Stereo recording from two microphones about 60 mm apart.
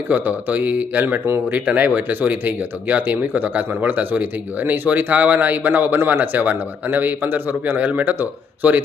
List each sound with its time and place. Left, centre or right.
0.1 s speech: right